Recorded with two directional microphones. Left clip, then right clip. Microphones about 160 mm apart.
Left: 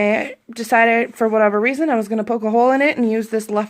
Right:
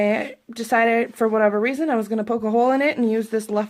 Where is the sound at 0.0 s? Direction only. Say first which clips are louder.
Left 3 dB; 15° left (ahead or behind).